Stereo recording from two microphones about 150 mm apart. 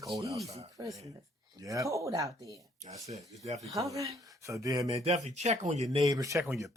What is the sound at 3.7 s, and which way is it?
Speech, 20° right (ahead or behind).